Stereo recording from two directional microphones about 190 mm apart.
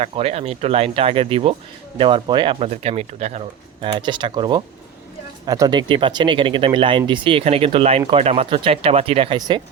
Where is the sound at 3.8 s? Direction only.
25° right (ahead or behind).